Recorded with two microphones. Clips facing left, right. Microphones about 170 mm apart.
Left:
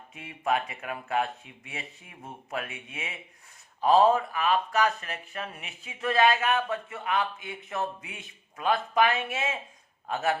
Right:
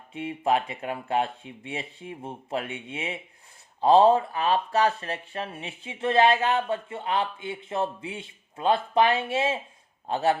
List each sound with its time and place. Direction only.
0.1 s speech: 30° right (ahead or behind)